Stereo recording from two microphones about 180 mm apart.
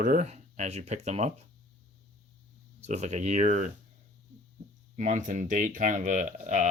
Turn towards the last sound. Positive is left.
turn(degrees=-45)  # may be behind; listen again after turning